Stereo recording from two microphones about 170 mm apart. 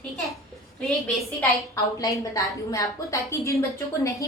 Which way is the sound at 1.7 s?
20° left (ahead or behind).